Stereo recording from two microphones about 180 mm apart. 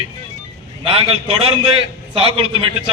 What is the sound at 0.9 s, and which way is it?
A man's voice, 30° right (ahead or behind).